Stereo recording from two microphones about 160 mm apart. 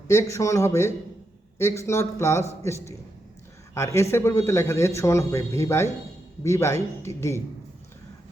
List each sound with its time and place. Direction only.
0.1 s a man's voice: 20° left (ahead or behind)